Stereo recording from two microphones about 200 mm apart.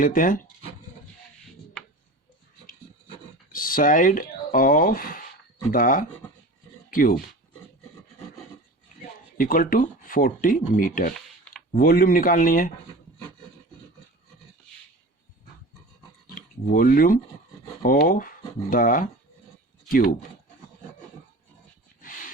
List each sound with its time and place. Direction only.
0.0 s speech: 45° left (ahead or behind)
3.5 s speech: 45° left (ahead or behind)
9.4 s speech: 45° left (ahead or behind)
16.3 s speech: 45° left (ahead or behind)